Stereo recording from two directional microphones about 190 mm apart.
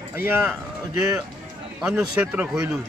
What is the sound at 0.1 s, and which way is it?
Speech, 10° right (ahead or behind).